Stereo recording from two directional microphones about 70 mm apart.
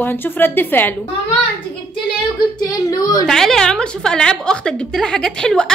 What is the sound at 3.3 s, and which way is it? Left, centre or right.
A woman's voice, centre.